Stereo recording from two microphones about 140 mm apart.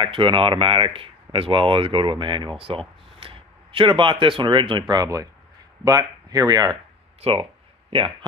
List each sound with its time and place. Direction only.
0.0 s speech: 40° right (ahead or behind)
7.2 s speech: 45° right (ahead or behind)